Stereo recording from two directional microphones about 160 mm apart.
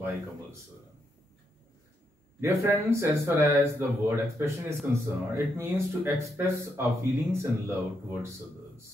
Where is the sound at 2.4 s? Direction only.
15° right (ahead or behind).